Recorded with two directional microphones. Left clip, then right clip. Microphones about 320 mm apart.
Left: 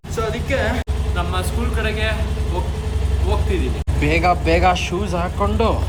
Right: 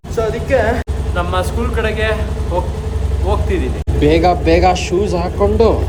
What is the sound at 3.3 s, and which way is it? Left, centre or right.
Speech, centre.